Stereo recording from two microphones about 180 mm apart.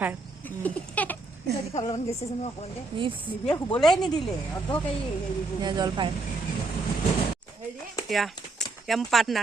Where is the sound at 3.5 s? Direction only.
25° left (ahead or behind).